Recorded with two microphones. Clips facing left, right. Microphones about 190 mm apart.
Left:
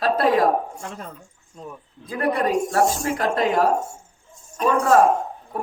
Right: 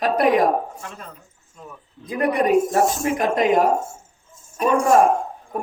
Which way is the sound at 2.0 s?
20° right (ahead or behind).